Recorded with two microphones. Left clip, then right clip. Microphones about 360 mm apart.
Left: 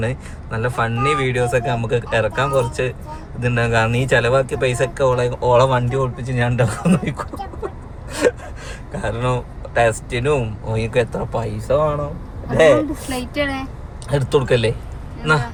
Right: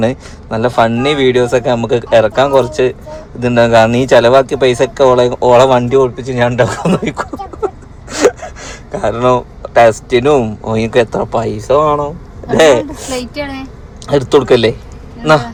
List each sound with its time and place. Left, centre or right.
0.0 s speech: centre
14.1 s a man's voice: centre